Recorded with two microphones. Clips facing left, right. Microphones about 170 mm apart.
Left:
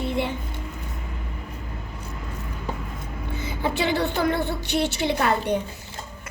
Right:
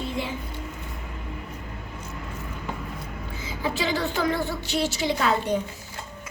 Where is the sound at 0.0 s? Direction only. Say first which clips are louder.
Left 4 dB; 65° left (ahead or behind).